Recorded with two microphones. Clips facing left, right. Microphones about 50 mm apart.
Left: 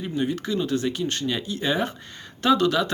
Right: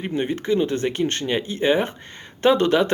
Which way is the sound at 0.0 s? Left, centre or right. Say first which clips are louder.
Right 2 dB; right.